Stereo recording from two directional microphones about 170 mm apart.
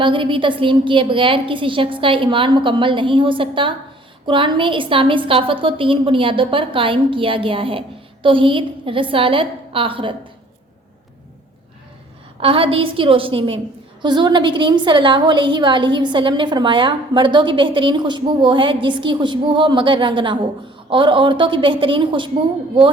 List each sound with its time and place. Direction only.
0.0 s a woman's voice: 30° right (ahead or behind)
12.4 s a woman's voice: 35° right (ahead or behind)